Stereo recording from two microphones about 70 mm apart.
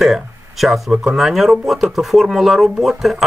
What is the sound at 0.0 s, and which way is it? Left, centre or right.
Speech, centre.